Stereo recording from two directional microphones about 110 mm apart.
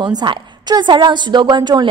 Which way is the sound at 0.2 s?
45° right (ahead or behind).